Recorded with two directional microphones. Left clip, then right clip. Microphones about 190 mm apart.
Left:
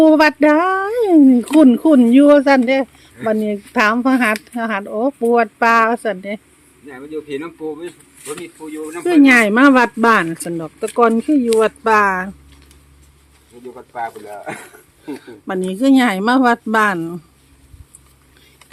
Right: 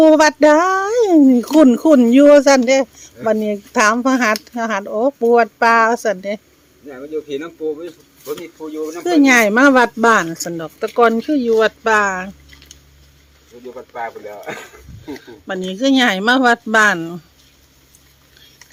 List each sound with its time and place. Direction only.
0.0 s speech: centre (ahead or behind)
6.8 s speech: 35° left (ahead or behind)
9.0 s speech: 5° left (ahead or behind)
13.7 s speech: 40° left (ahead or behind)
15.3 s speech: 20° left (ahead or behind)